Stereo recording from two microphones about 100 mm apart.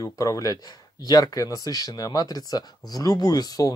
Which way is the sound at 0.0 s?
35° left (ahead or behind).